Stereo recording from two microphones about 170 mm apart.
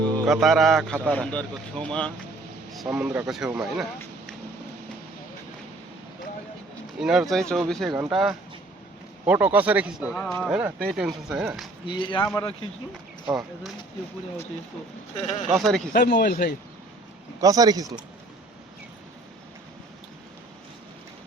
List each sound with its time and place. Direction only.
0.0 s speech: centre (ahead or behind)
7.0 s speech: 5° right (ahead or behind)
10.2 s speech: 5° left (ahead or behind)
10.4 s speech: 5° right (ahead or behind)
11.9 s speech: 30° left (ahead or behind)
12.2 s speech: 15° left (ahead or behind)
13.2 s speech: 5° right (ahead or behind)
15.5 s speech: centre (ahead or behind)
15.9 s speech: 75° left (ahead or behind)
17.4 s speech: 20° right (ahead or behind)